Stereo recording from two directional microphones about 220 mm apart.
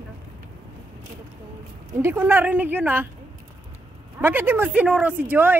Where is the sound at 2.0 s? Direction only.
10° right (ahead or behind).